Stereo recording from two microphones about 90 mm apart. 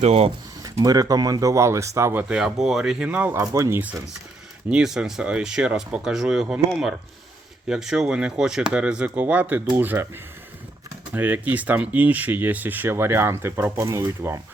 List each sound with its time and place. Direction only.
0.6 s speech: 45° right (ahead or behind)
2.3 s speech: 5° right (ahead or behind)
3.4 s speech: 35° right (ahead or behind)
4.7 s speech: 10° right (ahead or behind); by 10.1 s 25° right (ahead or behind)
11.1 s speech: 20° right (ahead or behind)